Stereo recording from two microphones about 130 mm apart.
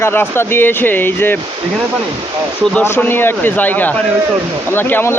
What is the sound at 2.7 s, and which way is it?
Speech, 15° left (ahead or behind).